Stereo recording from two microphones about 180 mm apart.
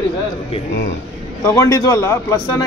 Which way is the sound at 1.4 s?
20° left (ahead or behind).